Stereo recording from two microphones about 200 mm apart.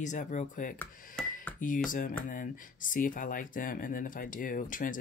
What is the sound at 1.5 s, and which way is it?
Speech, 40° left (ahead or behind).